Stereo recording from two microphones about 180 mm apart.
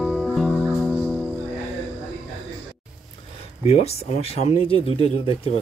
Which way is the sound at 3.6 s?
35° left (ahead or behind).